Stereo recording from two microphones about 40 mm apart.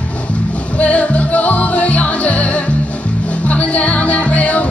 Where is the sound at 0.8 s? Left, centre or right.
Left.